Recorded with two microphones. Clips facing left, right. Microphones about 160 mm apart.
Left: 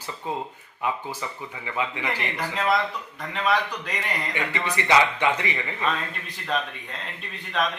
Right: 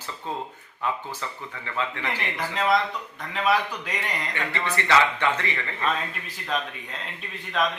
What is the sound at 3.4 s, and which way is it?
Speech, centre (ahead or behind).